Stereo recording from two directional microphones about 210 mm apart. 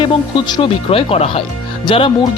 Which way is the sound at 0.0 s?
20° left (ahead or behind).